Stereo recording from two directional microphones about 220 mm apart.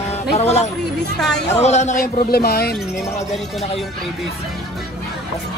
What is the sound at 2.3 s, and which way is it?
Speech, 45° left (ahead or behind).